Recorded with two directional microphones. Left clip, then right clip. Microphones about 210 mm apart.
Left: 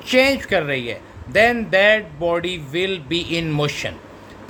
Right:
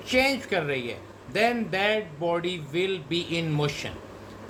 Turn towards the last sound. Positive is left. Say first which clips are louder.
# left 7 dB
turn(degrees=55)  # may be behind; listen again after turning